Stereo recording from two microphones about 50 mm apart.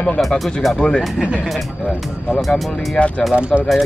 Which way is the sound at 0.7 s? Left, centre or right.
Centre.